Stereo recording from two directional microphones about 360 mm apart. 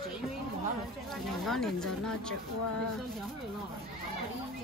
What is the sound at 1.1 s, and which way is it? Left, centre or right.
Speech, centre.